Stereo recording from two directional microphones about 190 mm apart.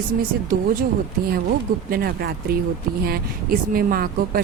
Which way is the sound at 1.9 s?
55° right (ahead or behind).